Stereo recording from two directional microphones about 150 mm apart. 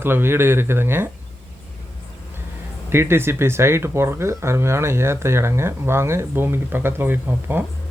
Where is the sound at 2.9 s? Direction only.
15° right (ahead or behind).